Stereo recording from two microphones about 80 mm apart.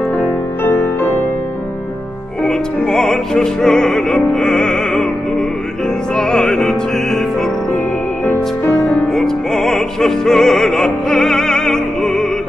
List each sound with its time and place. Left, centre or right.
0.2 s music: left
2.4 s music: centre
6.1 s music: centre
8.6 s music: centre